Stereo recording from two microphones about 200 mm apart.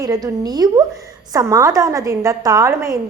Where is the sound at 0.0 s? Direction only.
20° right (ahead or behind).